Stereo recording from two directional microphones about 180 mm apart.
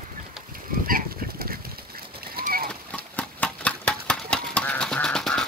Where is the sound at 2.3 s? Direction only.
55° right (ahead or behind).